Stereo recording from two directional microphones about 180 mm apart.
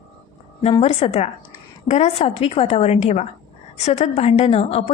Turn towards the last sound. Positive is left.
turn(degrees=35)  # may be behind; listen again after turning